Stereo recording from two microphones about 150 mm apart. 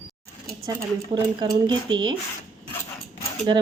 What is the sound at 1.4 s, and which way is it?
Speech, 30° right (ahead or behind).